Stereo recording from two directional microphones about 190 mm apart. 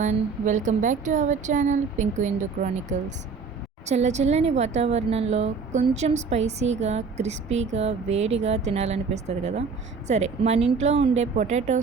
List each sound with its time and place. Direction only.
0.0 s a woman's voice: 40° right (ahead or behind)